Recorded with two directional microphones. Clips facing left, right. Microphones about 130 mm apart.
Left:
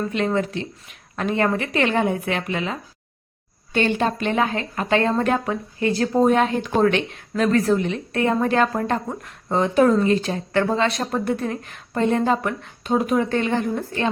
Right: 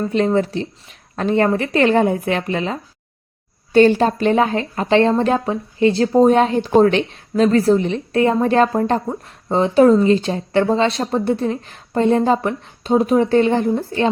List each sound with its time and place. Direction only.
0.3 s a woman's voice: 35° right (ahead or behind)